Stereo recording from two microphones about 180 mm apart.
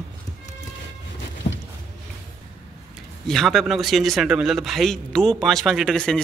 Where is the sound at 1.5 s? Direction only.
35° left (ahead or behind).